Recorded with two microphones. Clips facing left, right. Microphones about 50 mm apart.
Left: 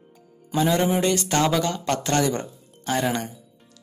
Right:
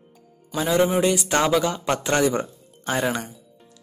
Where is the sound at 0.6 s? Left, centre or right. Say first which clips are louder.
Right 1 dB; centre.